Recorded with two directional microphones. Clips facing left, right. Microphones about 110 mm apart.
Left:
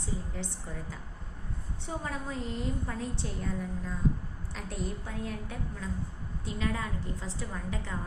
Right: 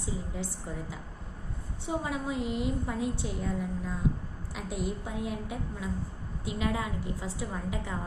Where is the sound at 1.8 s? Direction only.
10° right (ahead or behind).